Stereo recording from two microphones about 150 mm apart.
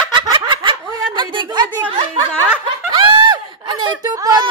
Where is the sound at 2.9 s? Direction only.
30° right (ahead or behind).